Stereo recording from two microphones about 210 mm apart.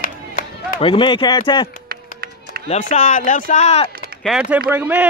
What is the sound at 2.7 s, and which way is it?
Speech, 35° left (ahead or behind).